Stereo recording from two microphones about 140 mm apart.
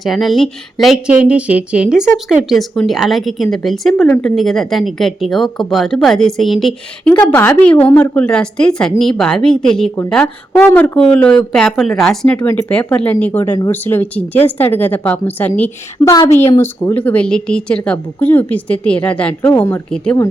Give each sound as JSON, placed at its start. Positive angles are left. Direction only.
{"t": 0.0, "sound": "a woman's voice", "side_deg": 0}
{"t": 16.0, "sound": "a woman's voice", "side_deg": 20}